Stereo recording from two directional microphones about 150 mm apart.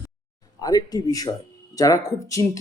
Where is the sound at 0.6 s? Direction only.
25° left (ahead or behind).